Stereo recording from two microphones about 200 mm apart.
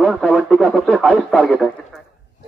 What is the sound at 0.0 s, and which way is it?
Speech, centre (ahead or behind).